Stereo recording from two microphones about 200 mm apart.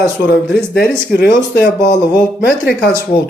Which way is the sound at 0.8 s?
50° left (ahead or behind).